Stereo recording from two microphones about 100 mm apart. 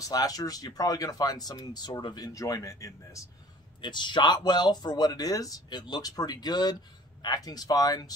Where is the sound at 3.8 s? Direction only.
50° left (ahead or behind).